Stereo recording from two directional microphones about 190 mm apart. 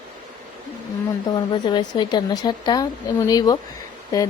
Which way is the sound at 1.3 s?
20° left (ahead or behind).